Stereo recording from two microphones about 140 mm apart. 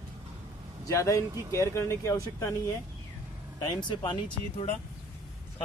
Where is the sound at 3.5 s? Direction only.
35° left (ahead or behind).